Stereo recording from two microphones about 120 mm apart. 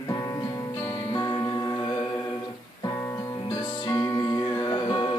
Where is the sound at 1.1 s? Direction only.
35° left (ahead or behind).